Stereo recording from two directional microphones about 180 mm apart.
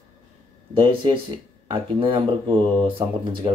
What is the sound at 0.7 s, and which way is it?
Speech, 30° right (ahead or behind).